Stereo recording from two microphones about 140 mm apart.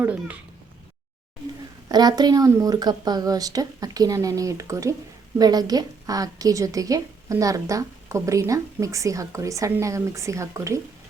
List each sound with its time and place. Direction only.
0.0 s speech: 10° right (ahead or behind)
1.9 s a woman's voice: 30° right (ahead or behind)